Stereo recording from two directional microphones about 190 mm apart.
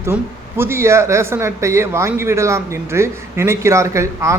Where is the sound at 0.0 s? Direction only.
10° right (ahead or behind).